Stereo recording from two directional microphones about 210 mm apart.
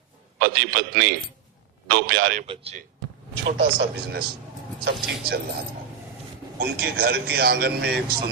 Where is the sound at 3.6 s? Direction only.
50° right (ahead or behind).